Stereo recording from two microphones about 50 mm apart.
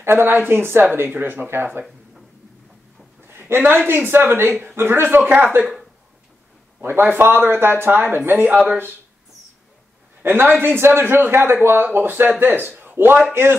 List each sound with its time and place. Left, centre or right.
0.0 s a man's voice: right
3.3 s a woman's voice: right
6.8 s a man's voice: right
10.2 s a man's voice: right